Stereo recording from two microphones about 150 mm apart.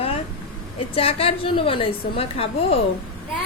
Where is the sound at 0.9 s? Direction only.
40° left (ahead or behind).